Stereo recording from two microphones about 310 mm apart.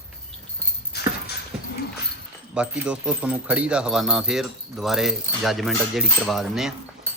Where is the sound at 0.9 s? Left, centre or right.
Left.